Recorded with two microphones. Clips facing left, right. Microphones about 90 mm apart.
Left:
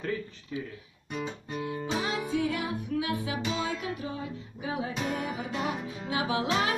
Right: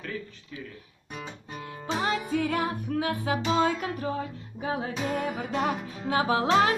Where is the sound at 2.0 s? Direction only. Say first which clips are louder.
Right 4 dB; 45° right (ahead or behind).